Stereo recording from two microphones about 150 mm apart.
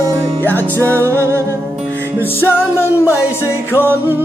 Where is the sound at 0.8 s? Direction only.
20° right (ahead or behind).